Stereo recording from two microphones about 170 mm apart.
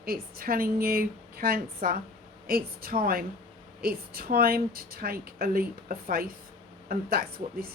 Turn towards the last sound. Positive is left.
turn(degrees=-60)  # may be behind; listen again after turning